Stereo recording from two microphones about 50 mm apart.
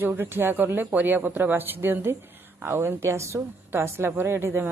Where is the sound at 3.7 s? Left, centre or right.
Right.